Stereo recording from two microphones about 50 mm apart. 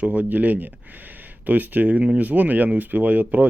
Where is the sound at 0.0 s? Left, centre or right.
Right.